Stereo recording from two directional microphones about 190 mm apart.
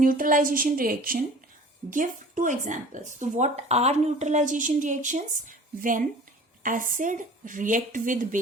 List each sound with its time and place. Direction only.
0.0 s speech: 45° right (ahead or behind)